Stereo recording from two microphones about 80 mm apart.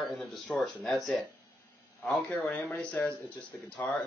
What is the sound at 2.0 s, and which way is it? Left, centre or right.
Speech, centre.